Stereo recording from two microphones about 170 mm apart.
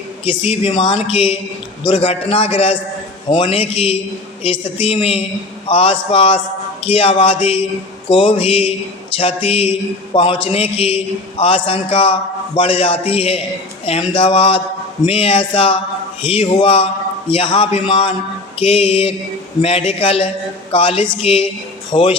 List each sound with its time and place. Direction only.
0.3 s a man's voice: 35° left (ahead or behind)